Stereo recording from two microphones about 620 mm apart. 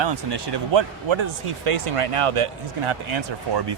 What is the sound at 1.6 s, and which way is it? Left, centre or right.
Speech, right.